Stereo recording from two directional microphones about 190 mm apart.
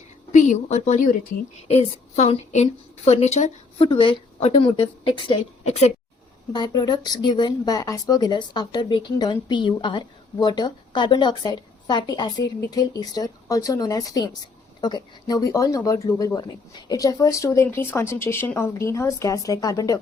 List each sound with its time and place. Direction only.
0.3 s a woman's voice: 40° left (ahead or behind)
3.8 s speech: 25° left (ahead or behind)
6.5 s speech: 20° left (ahead or behind)